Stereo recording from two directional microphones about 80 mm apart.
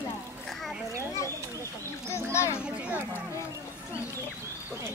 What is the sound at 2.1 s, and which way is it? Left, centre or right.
Speech, left.